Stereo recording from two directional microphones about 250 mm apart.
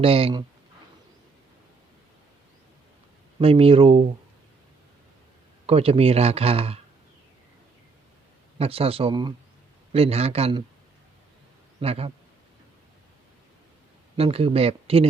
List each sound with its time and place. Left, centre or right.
0.0 s speech: right
3.4 s speech: right
5.6 s speech: right
8.5 s speech: right
11.8 s speech: right
14.2 s speech: right